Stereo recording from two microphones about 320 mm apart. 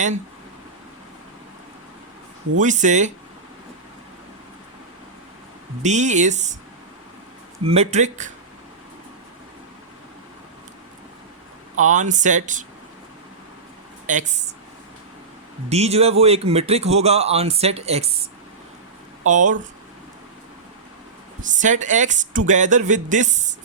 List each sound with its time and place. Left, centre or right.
2.6 s speech: right
5.8 s speech: right
7.7 s speech: right
11.8 s speech: right
15.7 s speech: centre
19.3 s speech: right
21.4 s speech: right